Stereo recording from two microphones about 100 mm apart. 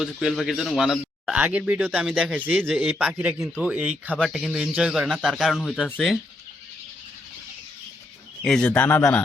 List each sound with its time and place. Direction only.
0.0 s a man's voice: centre (ahead or behind)
1.4 s speech: 15° right (ahead or behind)
4.2 s a man's voice: centre (ahead or behind)
8.4 s speech: 5° left (ahead or behind)
8.7 s speech: 15° left (ahead or behind)